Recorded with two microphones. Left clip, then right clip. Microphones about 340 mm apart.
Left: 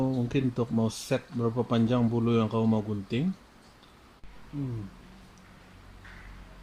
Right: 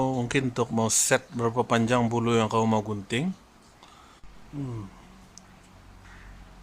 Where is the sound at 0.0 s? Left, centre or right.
Right.